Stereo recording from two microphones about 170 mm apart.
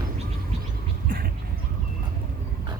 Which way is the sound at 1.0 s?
55° right (ahead or behind).